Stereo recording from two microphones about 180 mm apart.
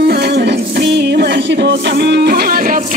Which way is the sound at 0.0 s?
65° right (ahead or behind).